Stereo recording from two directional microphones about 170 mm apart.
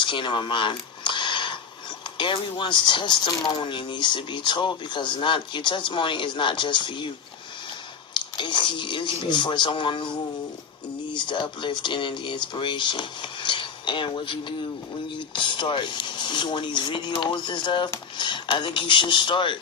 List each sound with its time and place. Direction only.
0.0 s a sound: 30° left (ahead or behind)
2.1 s speech: 30° left (ahead or behind)
8.1 s speech: 30° left (ahead or behind)
15.4 s speech: 30° left (ahead or behind)